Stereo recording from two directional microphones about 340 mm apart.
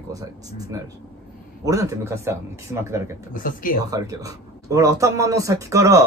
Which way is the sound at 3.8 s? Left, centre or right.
Centre.